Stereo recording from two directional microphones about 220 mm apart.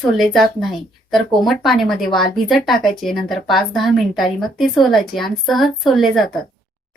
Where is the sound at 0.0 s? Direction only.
Centre (ahead or behind).